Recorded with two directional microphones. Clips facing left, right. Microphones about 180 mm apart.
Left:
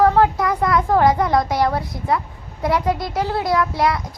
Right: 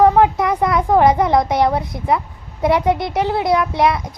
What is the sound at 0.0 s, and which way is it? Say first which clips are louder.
Speech: right 3 dB; 20° right (ahead or behind).